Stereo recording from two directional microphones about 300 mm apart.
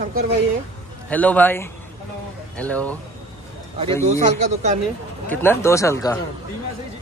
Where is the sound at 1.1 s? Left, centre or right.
Centre.